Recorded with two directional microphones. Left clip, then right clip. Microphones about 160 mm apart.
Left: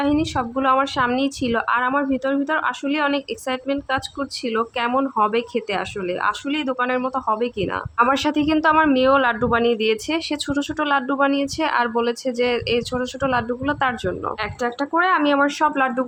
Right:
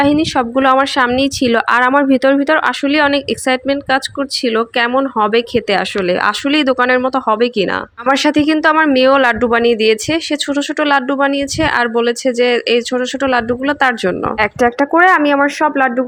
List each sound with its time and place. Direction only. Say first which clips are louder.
0.0 s a woman's voice: right 8 dB; 30° right (ahead or behind)
14.3 s a woman's voice: right 11 dB; 35° right (ahead or behind); by 16.0 s 20° right (ahead or behind)